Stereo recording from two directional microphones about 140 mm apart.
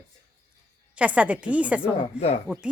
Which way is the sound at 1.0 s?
10° right (ahead or behind).